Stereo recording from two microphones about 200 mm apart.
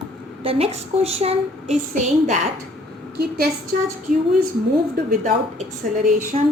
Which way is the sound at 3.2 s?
50° right (ahead or behind).